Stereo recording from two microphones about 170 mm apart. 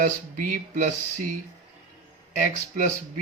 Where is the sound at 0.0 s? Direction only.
50° right (ahead or behind).